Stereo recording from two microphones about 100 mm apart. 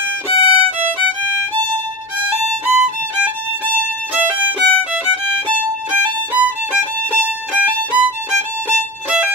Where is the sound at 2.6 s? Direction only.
20° right (ahead or behind).